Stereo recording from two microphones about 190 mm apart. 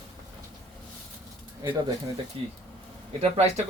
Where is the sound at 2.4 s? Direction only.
30° right (ahead or behind).